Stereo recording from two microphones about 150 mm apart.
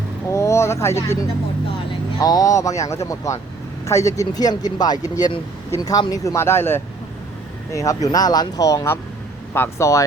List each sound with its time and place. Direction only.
0.3 s vehicle: 20° left (ahead or behind)
1.9 s speech: 25° left (ahead or behind)